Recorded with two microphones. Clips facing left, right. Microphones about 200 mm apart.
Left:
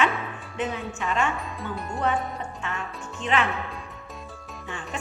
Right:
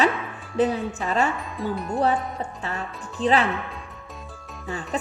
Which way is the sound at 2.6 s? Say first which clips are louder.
Right 2 dB; 35° right (ahead or behind).